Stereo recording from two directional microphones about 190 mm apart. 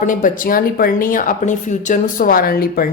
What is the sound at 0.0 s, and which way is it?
A woman's voice, 45° left (ahead or behind).